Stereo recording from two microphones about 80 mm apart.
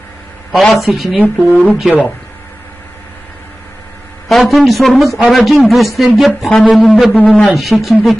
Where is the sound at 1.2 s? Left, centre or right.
Centre.